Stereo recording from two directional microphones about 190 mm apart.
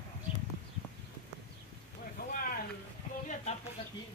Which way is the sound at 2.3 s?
50° left (ahead or behind).